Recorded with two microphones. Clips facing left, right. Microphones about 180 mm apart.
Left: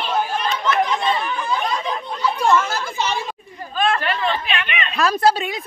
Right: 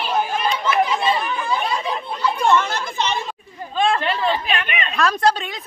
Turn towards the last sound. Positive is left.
turn(degrees=5)  # may be behind; listen again after turning